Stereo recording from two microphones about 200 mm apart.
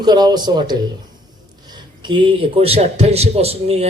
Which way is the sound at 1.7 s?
25° right (ahead or behind).